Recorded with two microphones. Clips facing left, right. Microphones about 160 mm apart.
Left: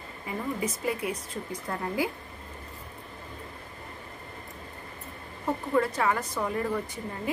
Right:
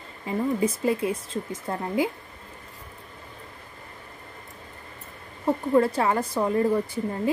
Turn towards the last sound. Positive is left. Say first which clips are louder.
# right 8 dB
turn(degrees=-30)  # may be behind; listen again after turning